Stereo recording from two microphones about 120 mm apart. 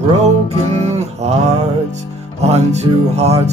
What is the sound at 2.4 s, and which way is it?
Music, 65° right (ahead or behind).